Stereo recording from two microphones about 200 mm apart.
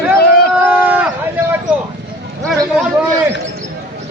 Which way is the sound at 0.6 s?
10° right (ahead or behind).